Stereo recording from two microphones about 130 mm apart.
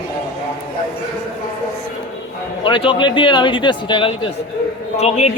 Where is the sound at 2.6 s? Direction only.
40° left (ahead or behind).